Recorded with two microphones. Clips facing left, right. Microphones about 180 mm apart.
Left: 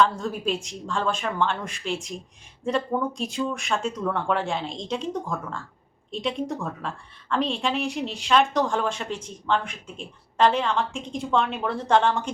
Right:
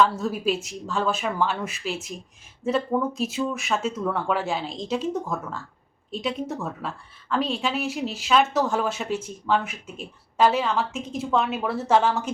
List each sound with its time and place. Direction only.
0.0 s a woman's voice: 5° right (ahead or behind)